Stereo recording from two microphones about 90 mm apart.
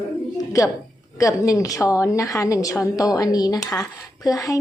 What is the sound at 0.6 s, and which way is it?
A woman's voice, 35° left (ahead or behind).